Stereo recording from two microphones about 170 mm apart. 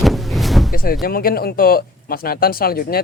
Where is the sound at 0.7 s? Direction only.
60° left (ahead or behind).